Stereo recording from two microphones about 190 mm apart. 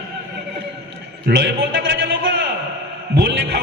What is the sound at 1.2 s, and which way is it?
Speech, 60° right (ahead or behind).